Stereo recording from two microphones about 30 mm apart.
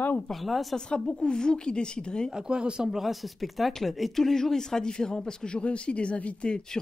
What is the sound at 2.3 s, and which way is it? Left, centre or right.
Speech, right.